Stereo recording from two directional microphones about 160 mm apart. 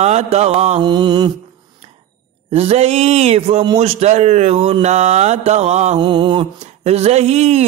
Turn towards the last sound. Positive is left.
turn(degrees=-40)  # may be behind; listen again after turning